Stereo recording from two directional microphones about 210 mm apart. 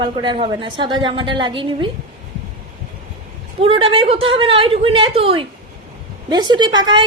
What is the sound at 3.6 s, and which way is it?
A woman's voice, 25° right (ahead or behind).